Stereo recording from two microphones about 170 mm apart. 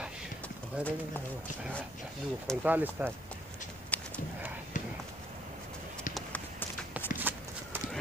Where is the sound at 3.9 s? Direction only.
10° left (ahead or behind).